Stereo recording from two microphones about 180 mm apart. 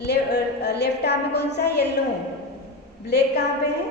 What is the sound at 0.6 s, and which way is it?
A woman's voice, 65° left (ahead or behind).